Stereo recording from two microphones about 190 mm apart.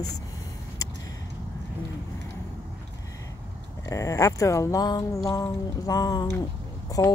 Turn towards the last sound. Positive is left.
turn(degrees=15)  # may be behind; listen again after turning